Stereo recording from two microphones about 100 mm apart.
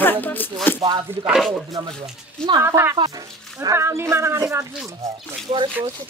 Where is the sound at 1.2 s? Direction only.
5° right (ahead or behind).